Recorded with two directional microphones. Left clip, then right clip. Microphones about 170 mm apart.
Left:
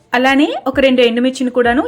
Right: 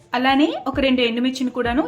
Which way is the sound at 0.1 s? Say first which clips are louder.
Left 5 dB; 30° left (ahead or behind).